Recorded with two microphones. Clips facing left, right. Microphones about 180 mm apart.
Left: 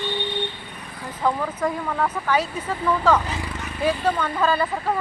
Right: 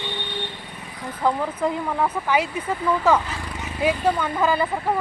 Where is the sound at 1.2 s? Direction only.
15° right (ahead or behind).